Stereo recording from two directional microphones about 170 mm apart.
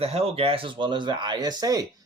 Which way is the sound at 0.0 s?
35° right (ahead or behind).